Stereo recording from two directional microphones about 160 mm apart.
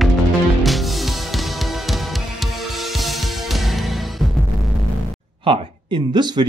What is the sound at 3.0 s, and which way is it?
Music, centre (ahead or behind).